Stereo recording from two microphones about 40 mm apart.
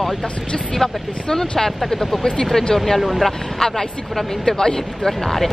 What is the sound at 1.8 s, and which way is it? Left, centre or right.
Speech, centre.